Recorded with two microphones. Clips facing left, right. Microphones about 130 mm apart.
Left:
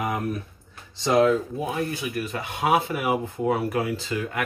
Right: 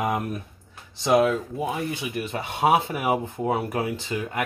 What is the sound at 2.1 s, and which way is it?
Speech, 25° right (ahead or behind).